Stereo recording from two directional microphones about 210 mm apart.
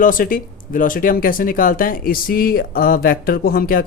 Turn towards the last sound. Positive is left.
turn(degrees=45)  # may be behind; listen again after turning